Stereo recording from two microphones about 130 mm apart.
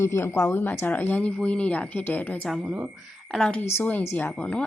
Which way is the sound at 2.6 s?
15° right (ahead or behind).